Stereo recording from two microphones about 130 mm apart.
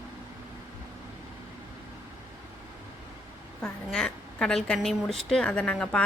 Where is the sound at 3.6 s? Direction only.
5° left (ahead or behind).